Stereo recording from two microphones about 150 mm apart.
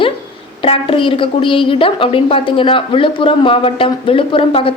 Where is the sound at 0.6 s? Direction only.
35° left (ahead or behind).